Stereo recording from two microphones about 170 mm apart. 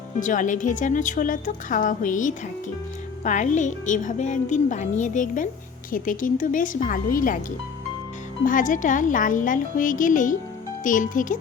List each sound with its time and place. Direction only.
0.2 s a woman's voice: 50° left (ahead or behind)
8.4 s a woman's voice: 50° left (ahead or behind)